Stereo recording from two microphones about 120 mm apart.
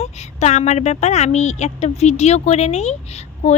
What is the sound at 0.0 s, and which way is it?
A woman's voice, 65° left (ahead or behind).